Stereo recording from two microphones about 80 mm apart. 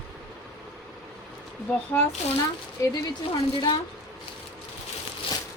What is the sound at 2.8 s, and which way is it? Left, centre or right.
Speech, left.